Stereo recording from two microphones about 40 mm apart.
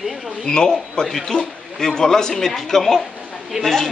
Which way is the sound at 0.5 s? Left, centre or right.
Centre.